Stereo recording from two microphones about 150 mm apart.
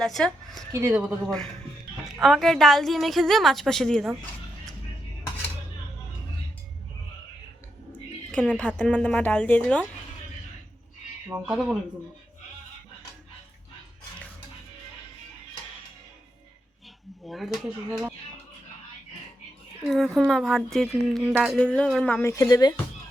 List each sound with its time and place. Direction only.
0.0 s a woman's voice: centre (ahead or behind)
0.7 s speech: 15° right (ahead or behind)
1.0 s a woman's voice: 5° left (ahead or behind)
8.3 s speech: 5° left (ahead or behind)
11.3 s a woman's voice: 5° right (ahead or behind)
17.2 s a woman's voice: centre (ahead or behind)
19.9 s a woman's voice: centre (ahead or behind)
21.6 s speech: 5° left (ahead or behind); by 22.7 s 25° left (ahead or behind)